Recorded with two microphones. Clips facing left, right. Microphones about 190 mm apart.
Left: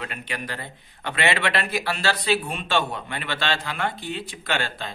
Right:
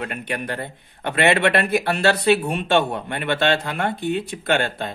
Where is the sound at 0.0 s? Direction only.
55° right (ahead or behind).